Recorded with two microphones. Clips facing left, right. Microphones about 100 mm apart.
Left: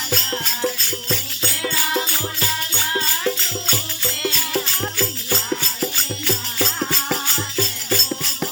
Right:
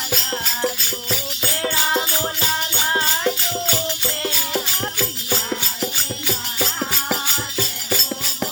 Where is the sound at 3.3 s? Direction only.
15° right (ahead or behind).